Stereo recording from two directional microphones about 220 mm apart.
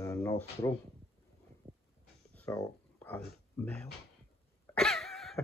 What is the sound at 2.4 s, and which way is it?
Speech, 10° left (ahead or behind).